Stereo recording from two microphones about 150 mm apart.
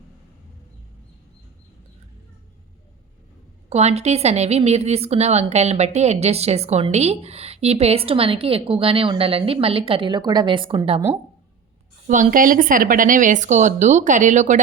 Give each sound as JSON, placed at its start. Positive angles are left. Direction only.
{"t": 3.7, "sound": "a woman's voice", "side_deg": -45}
{"t": 12.0, "sound": "speech", "side_deg": -60}